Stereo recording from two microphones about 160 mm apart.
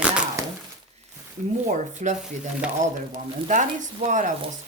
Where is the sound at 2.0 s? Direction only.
45° right (ahead or behind).